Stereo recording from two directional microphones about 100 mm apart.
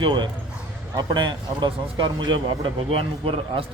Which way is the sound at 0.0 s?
55° right (ahead or behind).